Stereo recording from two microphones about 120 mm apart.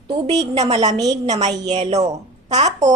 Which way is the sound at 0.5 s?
60° right (ahead or behind).